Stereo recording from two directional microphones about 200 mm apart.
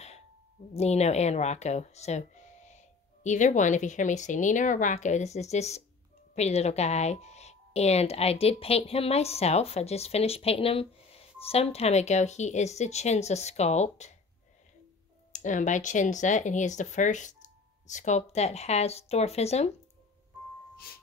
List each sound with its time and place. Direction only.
0.7 s speech: 35° left (ahead or behind)
15.3 s speech: 40° left (ahead or behind)